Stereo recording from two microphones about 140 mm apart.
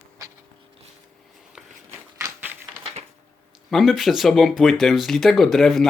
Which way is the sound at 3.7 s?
Centre (ahead or behind).